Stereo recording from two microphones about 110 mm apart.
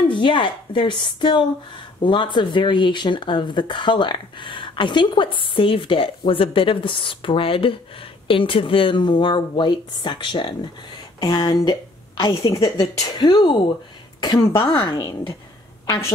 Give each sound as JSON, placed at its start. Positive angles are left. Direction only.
{"t": 0.1, "sound": "a woman's voice", "side_deg": 50}
{"t": 14.6, "sound": "speech", "side_deg": 55}